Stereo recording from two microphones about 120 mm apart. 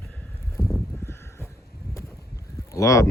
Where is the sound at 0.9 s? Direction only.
20° left (ahead or behind).